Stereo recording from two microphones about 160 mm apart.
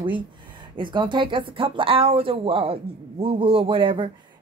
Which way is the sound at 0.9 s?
30° right (ahead or behind).